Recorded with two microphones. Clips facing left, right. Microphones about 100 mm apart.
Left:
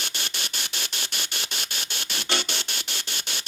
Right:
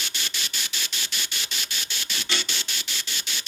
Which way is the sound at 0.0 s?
55° left (ahead or behind).